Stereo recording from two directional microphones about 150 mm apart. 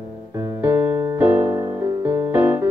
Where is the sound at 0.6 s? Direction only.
15° right (ahead or behind).